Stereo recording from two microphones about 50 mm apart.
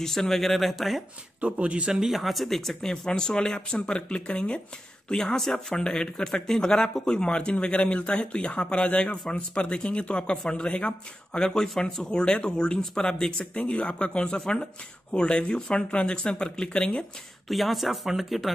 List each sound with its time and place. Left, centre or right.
0.0 s speech: centre
1.4 s speech: right
1.9 s speech: centre
2.1 s a man's voice: centre; by 17.0 s left
17.5 s speech: centre